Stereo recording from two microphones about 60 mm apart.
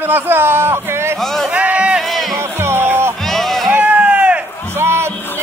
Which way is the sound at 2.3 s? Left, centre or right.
Right.